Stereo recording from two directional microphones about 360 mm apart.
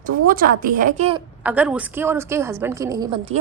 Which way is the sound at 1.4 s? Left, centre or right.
Centre.